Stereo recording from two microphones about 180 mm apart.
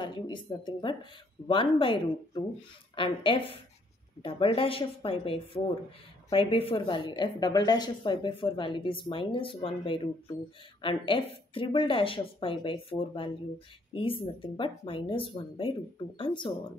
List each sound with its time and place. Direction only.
0.0 s a woman's voice: 25° left (ahead or behind)